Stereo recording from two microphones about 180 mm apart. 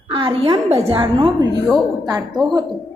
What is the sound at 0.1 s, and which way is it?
A woman's voice, 30° right (ahead or behind).